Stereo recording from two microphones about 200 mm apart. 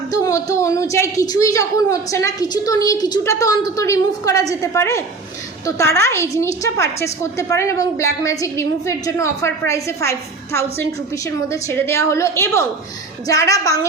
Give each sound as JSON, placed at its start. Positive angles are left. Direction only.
{"t": 0.1, "sound": "a woman's voice", "side_deg": 15}